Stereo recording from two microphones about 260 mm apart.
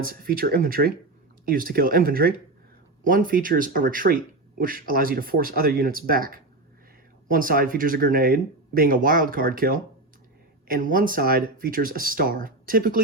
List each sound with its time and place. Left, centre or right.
0.0 s speech: right